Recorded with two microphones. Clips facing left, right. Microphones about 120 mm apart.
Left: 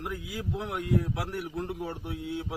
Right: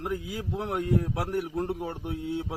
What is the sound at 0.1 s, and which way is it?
A man's voice, 45° right (ahead or behind).